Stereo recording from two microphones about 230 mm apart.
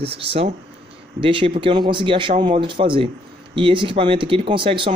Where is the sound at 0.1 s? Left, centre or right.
Right.